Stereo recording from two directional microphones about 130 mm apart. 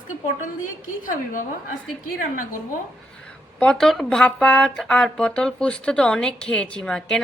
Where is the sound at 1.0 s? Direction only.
90° left.